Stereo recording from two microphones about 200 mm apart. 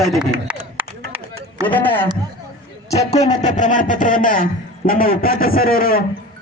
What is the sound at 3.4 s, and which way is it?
A man's voice, 40° left (ahead or behind).